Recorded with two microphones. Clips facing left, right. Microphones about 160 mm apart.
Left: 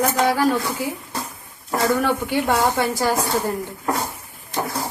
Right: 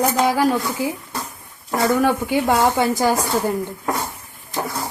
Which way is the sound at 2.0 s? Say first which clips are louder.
Right 2 dB; 15° right (ahead or behind).